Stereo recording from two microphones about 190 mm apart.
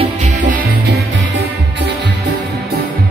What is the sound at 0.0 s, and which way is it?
Music, 40° right (ahead or behind).